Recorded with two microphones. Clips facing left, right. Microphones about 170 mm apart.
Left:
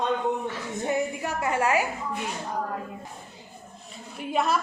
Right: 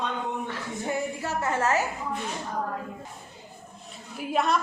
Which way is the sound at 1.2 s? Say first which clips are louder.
Left 1 dB; 15° left (ahead or behind).